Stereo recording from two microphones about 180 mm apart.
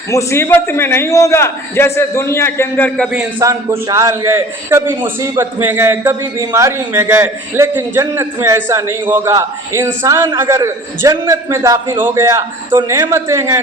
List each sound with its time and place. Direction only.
0.1 s a man's voice: 15° left (ahead or behind)
3.3 s a man's voice: 20° right (ahead or behind)